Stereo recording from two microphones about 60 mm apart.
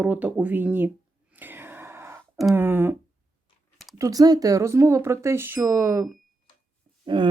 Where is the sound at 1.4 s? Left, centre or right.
Right.